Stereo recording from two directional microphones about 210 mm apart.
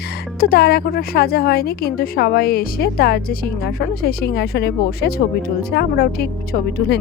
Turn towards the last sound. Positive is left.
turn(degrees=45)  # may be behind; listen again after turning